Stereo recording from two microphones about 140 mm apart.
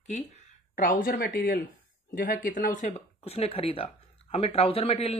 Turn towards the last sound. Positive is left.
turn(degrees=45)  # may be behind; listen again after turning